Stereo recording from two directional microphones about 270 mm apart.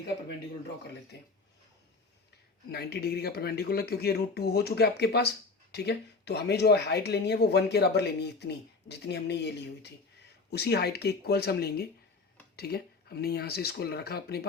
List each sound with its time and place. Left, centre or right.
1.1 s speech: left
2.7 s speech: left